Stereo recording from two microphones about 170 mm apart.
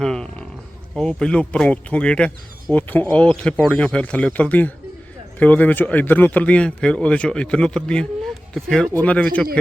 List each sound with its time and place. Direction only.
0.0 s roaring cats: 5° left (ahead or behind)
0.9 s speech: 5° left (ahead or behind)